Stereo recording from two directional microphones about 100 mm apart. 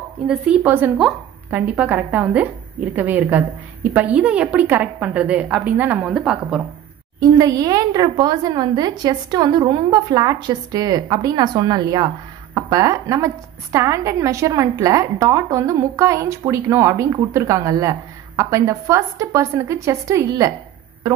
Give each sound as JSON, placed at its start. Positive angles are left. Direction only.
{"t": 0.3, "sound": "speech", "side_deg": -15}
{"t": 7.2, "sound": "a woman's voice", "side_deg": -40}